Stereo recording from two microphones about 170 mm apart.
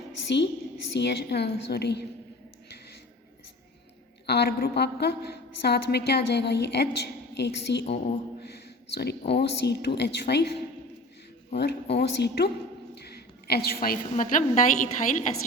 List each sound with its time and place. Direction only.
0.3 s a woman's voice: 90° left
4.3 s a woman's voice: 70° left (ahead or behind)
12.9 s a sound: 70° left (ahead or behind)
13.8 s a woman's voice: 55° left (ahead or behind)